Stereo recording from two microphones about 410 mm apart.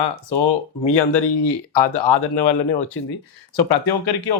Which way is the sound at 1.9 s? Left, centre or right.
Left.